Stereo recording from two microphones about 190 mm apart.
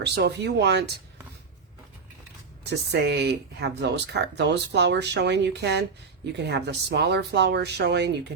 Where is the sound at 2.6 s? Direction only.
60° right (ahead or behind).